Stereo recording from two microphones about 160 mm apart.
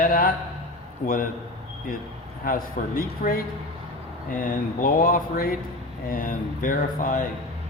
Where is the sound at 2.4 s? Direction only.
65° left (ahead or behind).